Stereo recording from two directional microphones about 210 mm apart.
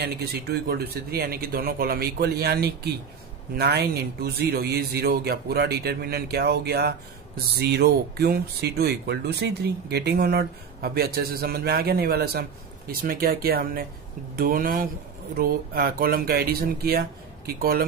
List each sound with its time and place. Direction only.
0.0 s speech: 50° right (ahead or behind)